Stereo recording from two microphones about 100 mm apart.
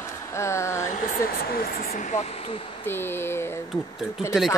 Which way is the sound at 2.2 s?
90° left.